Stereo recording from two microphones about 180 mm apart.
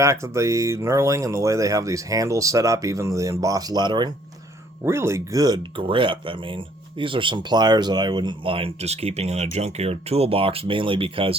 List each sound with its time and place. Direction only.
0.0 s speech: 15° right (ahead or behind)